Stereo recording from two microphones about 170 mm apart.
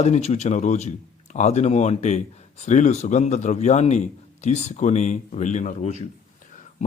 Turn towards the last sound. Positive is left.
turn(degrees=45)  # may be behind; listen again after turning